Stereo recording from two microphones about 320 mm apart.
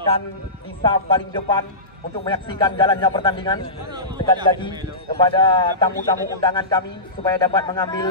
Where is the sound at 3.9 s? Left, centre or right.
Centre.